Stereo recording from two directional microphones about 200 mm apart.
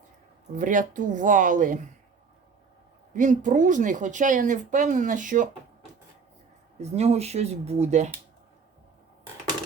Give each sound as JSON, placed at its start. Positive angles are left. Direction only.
{"t": 0.5, "sound": "speech", "side_deg": -40}
{"t": 3.1, "sound": "speech", "side_deg": -40}
{"t": 6.7, "sound": "speech", "side_deg": -30}